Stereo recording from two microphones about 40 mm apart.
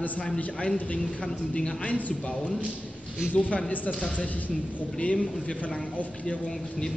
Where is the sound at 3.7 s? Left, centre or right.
Left.